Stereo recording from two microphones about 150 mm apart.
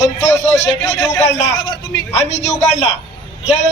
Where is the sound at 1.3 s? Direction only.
45° left (ahead or behind).